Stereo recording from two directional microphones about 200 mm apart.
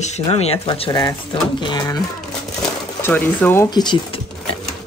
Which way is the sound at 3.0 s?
10° left (ahead or behind).